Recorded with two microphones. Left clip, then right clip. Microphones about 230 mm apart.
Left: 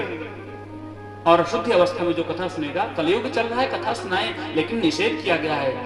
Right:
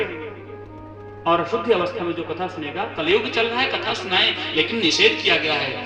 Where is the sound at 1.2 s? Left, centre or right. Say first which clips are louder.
Left 2 dB; left.